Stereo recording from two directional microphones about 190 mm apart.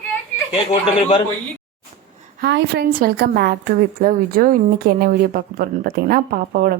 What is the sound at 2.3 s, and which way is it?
A woman's voice, 65° right (ahead or behind).